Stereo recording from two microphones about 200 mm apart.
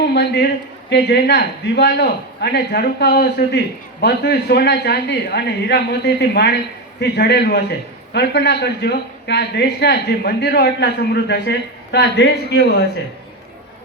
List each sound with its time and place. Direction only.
0.1 s a man's voice: 55° left (ahead or behind)